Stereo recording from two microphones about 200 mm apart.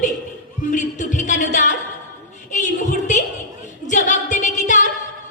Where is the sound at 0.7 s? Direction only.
40° left (ahead or behind).